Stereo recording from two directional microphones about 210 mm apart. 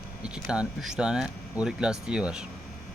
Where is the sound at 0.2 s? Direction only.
5° right (ahead or behind).